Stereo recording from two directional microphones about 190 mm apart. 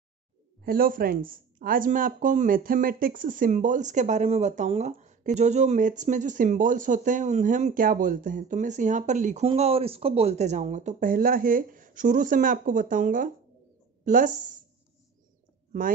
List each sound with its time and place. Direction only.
0.7 s speech: 50° right (ahead or behind)